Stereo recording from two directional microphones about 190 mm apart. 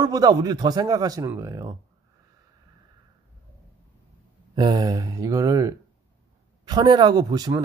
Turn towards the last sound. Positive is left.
turn(degrees=-20)  # may be behind; listen again after turning